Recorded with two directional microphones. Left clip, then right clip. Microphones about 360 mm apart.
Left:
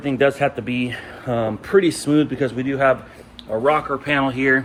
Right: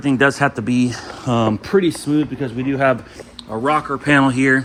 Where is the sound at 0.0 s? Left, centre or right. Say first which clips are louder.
Right 2 dB; centre.